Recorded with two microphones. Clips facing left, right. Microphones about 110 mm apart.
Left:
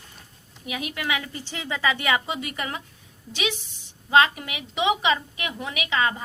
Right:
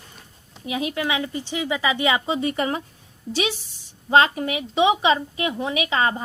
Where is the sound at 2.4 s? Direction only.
30° right (ahead or behind).